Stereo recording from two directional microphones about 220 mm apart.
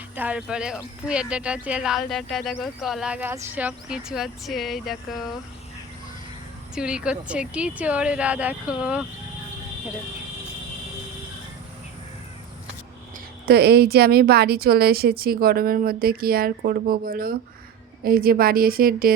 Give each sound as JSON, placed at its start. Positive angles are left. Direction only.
{"t": 0.2, "sound": "speech", "side_deg": -5}
{"t": 6.7, "sound": "speech", "side_deg": -5}
{"t": 13.4, "sound": "speech", "side_deg": -45}